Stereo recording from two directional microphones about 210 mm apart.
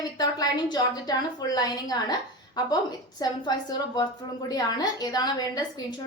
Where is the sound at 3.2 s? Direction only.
20° left (ahead or behind).